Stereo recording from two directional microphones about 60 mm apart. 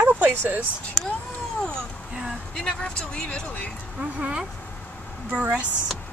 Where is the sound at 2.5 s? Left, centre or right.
Centre.